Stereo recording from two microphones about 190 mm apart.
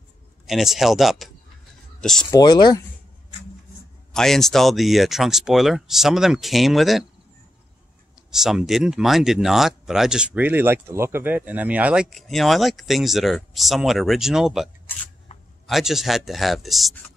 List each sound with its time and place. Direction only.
0.5 s speech: centre (ahead or behind)
2.0 s a sound: 5° left (ahead or behind)
2.3 s speech: 20° left (ahead or behind)
4.1 s speech: centre (ahead or behind)
8.3 s speech: centre (ahead or behind)
15.3 s a sound: 30° left (ahead or behind)
15.6 s speech: centre (ahead or behind)